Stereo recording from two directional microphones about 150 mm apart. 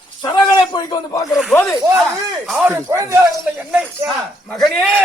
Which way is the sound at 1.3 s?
Centre (ahead or behind).